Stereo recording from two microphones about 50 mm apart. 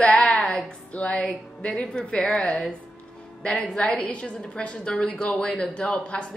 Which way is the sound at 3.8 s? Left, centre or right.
Left.